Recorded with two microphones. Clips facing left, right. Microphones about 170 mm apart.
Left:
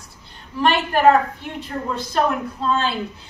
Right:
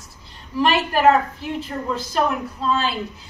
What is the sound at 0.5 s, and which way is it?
Speech, 5° right (ahead or behind).